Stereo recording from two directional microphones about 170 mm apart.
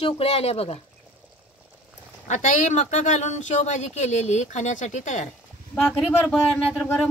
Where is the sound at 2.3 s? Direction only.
45° left (ahead or behind).